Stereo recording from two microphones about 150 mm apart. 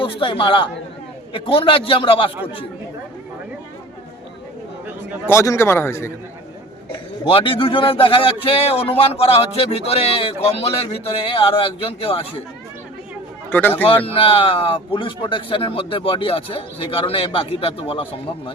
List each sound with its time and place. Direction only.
0.0 s speech: 35° left (ahead or behind)
5.2 s a man's voice: 20° left (ahead or behind)
7.3 s speech: 35° left (ahead or behind)
13.5 s a man's voice: 15° left (ahead or behind)
13.8 s speech: 40° left (ahead or behind)